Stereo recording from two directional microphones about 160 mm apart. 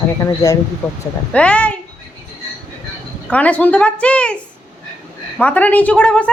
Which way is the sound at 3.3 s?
10° left (ahead or behind).